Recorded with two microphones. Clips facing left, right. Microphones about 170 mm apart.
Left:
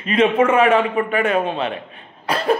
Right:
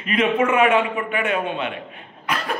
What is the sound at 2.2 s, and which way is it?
Cough, 30° left (ahead or behind).